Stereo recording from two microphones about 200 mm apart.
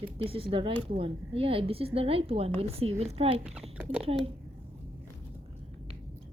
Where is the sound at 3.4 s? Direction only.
5° right (ahead or behind).